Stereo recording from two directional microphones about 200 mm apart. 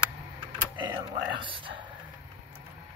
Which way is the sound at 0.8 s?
20° right (ahead or behind).